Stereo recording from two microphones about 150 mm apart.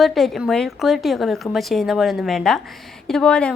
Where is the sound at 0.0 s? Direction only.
Centre (ahead or behind).